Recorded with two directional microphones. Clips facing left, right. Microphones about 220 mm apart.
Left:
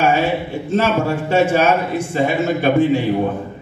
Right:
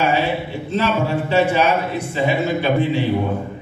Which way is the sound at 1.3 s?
50° left (ahead or behind).